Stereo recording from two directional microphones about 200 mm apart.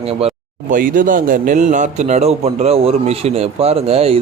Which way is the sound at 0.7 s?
40° right (ahead or behind).